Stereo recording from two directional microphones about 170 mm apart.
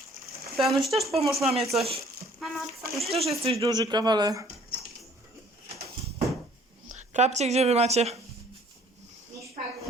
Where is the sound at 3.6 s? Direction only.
25° right (ahead or behind).